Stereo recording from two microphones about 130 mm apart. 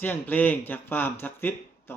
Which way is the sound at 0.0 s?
15° left (ahead or behind).